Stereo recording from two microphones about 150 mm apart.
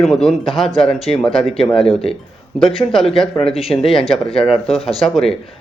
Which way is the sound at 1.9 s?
40° left (ahead or behind).